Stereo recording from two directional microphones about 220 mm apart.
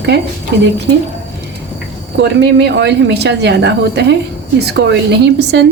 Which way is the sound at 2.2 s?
50° right (ahead or behind).